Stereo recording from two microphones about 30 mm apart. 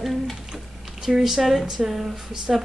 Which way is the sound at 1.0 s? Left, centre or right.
Centre.